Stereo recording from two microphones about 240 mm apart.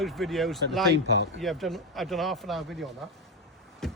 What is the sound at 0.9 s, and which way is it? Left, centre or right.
Speech, right.